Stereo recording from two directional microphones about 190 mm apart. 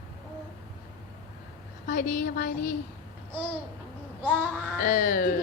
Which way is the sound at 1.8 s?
45° left (ahead or behind).